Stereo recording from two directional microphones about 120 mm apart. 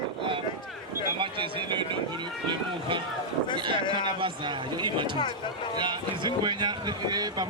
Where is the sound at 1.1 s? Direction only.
45° right (ahead or behind).